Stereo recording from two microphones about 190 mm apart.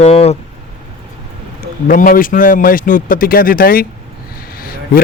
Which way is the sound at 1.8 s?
45° left (ahead or behind).